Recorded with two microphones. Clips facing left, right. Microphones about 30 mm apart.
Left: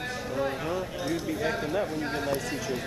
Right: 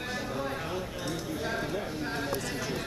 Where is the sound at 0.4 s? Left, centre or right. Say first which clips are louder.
Left 4 dB; centre.